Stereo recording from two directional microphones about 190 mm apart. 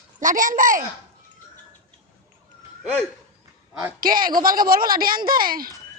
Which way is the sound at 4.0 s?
50° right (ahead or behind).